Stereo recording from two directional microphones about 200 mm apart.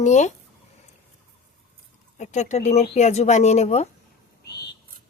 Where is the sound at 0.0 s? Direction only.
35° left (ahead or behind).